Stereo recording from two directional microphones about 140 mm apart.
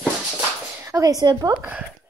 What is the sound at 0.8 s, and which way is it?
Speech, 25° right (ahead or behind).